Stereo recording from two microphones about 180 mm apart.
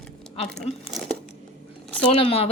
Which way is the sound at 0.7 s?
35° left (ahead or behind).